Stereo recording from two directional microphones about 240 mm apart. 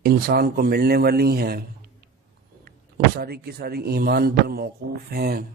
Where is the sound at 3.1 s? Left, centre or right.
Right.